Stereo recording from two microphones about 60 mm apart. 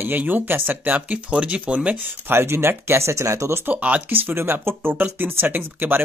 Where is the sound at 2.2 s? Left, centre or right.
Right.